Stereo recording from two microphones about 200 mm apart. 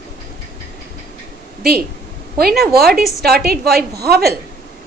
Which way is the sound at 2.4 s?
50° right (ahead or behind).